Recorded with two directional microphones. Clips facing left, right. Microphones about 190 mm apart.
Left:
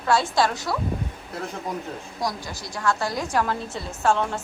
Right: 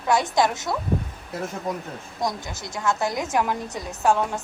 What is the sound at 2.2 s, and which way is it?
A woman's voice, 20° right (ahead or behind).